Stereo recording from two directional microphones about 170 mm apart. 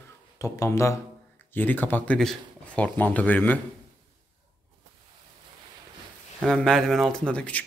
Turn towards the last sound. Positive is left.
turn(degrees=10)  # may be behind; listen again after turning